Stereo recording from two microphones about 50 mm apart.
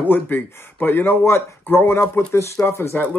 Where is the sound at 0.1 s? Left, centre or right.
Left.